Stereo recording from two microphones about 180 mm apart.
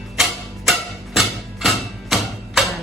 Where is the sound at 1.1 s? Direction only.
Centre (ahead or behind).